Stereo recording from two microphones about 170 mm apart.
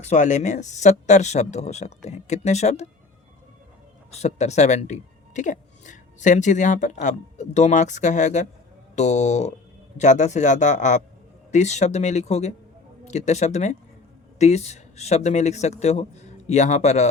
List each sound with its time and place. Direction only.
0.0 s speech: 45° left (ahead or behind)
4.1 s a man's voice: 40° left (ahead or behind)